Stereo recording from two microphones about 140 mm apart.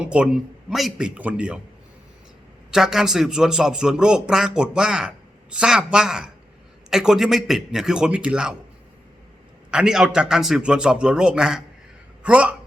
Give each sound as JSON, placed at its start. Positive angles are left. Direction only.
{"t": 0.0, "sound": "a man's voice", "side_deg": -10}
{"t": 2.7, "sound": "a man's voice", "side_deg": -5}
{"t": 9.7, "sound": "a man's voice", "side_deg": -5}